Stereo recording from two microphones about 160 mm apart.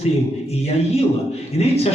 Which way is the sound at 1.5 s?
40° left (ahead or behind).